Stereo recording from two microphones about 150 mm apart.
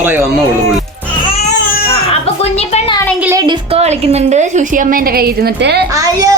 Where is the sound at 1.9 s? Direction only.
40° left (ahead or behind).